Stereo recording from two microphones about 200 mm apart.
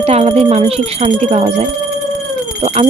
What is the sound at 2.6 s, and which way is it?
Speech, 30° right (ahead or behind).